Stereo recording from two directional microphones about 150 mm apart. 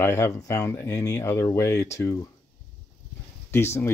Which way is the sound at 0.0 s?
20° left (ahead or behind).